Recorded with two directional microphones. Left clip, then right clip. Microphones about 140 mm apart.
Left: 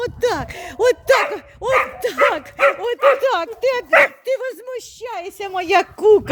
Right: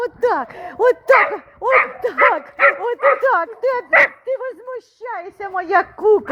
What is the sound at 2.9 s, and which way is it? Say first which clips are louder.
Speech: even; 40° left (ahead or behind).